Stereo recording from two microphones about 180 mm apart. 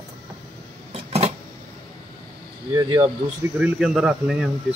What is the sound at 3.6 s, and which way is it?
Speech, centre (ahead or behind).